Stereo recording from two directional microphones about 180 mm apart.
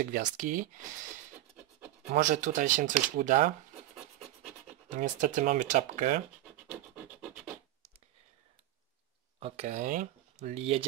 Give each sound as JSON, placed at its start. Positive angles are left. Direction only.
{"t": 0.0, "sound": "speech", "side_deg": -45}
{"t": 2.0, "sound": "speech", "side_deg": -45}
{"t": 4.8, "sound": "speech", "side_deg": -45}
{"t": 6.4, "sound": "scratch", "side_deg": -5}
{"t": 9.4, "sound": "speech", "side_deg": -40}